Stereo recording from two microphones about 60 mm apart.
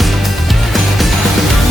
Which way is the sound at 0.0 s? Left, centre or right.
Centre.